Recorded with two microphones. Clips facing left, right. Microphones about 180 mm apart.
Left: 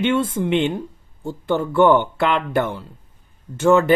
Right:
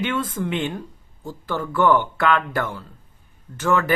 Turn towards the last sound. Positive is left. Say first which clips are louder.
# left 6 dB
turn(degrees=25)  # may be behind; listen again after turning